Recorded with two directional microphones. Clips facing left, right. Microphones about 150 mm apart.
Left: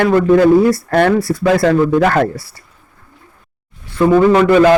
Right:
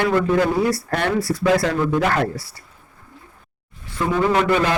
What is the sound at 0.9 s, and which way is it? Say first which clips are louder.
A man's voice: left 8 dB; 65° left (ahead or behind).